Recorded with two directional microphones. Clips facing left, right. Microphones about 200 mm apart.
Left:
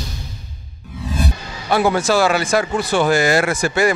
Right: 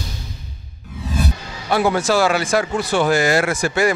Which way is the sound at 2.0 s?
15° left (ahead or behind).